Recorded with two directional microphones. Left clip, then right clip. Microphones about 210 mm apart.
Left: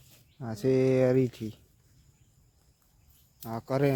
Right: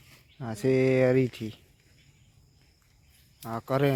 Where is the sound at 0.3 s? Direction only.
Centre (ahead or behind).